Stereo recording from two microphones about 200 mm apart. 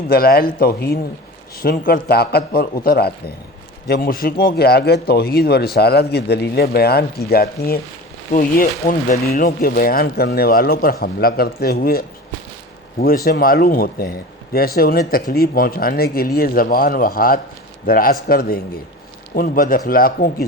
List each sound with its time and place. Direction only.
0.1 s speech: 50° left (ahead or behind)